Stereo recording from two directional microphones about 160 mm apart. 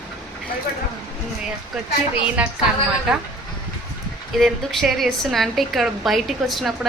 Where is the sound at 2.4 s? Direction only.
10° right (ahead or behind).